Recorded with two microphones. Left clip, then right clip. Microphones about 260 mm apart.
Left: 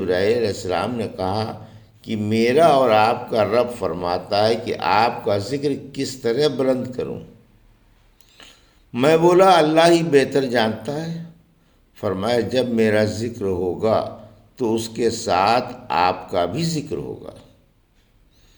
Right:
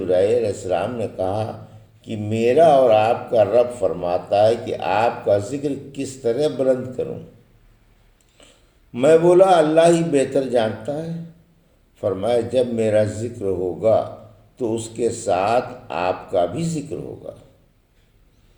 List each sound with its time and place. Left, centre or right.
0.0 s speech: left
8.4 s a sound: left
9.2 s speech: left
12.2 s speech: left